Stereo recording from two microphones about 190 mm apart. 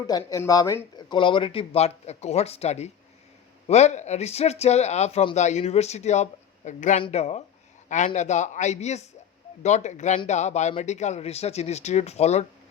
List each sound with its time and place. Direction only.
0.1 s speech: 15° left (ahead or behind); by 12.5 s 35° left (ahead or behind)